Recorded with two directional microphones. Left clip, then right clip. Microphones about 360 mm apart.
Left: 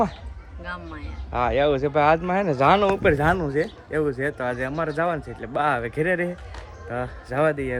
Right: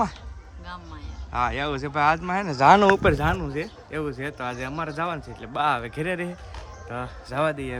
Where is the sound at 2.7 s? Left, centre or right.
Right.